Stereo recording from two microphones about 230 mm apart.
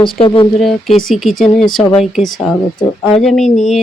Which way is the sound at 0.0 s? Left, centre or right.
Left.